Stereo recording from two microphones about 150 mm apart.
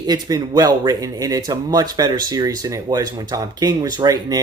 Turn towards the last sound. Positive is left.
turn(degrees=-25)  # may be behind; listen again after turning